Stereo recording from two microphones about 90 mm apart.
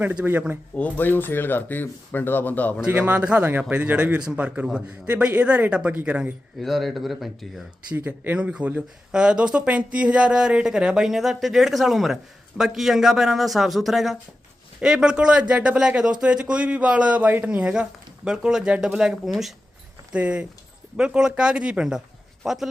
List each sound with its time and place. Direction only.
0.0 s a man's voice: 15° right (ahead or behind)
0.8 s speech: 20° left (ahead or behind)
2.8 s a man's voice: 20° right (ahead or behind)
6.6 s speech: centre (ahead or behind)
7.9 s a man's voice: 20° right (ahead or behind); by 19.5 s centre (ahead or behind)
20.1 s a man's voice: 10° right (ahead or behind)